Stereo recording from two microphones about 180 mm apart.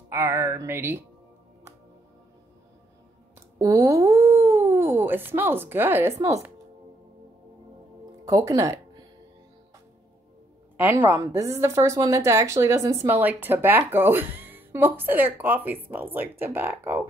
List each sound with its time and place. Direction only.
0.1 s a woman's voice: 15° right (ahead or behind)
3.5 s speech: 20° right (ahead or behind)
8.3 s speech: 15° right (ahead or behind)
10.8 s a woman's voice: 10° right (ahead or behind)